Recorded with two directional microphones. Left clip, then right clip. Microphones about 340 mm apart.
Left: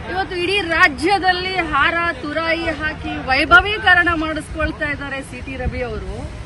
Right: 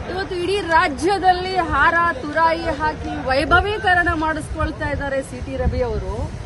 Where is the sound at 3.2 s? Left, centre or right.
Centre.